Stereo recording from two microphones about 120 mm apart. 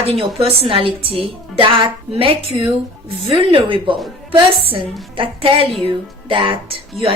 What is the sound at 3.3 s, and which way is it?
A woman's voice, 50° right (ahead or behind).